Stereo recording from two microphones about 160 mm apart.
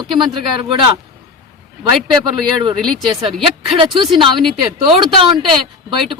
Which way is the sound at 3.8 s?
30° right (ahead or behind).